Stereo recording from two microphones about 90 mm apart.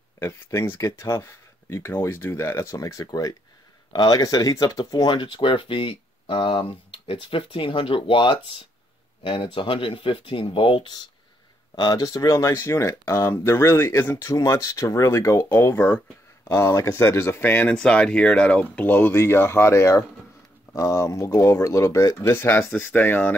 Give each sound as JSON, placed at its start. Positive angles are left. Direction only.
{"t": 0.2, "sound": "speech", "side_deg": 30}
{"t": 5.1, "sound": "speech", "side_deg": 65}
{"t": 11.7, "sound": "speech", "side_deg": 45}
{"t": 16.4, "sound": "speech", "side_deg": 35}
{"t": 17.7, "sound": "speech", "side_deg": 10}